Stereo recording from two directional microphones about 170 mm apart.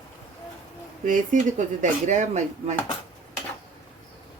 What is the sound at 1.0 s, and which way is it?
Speech, 45° right (ahead or behind).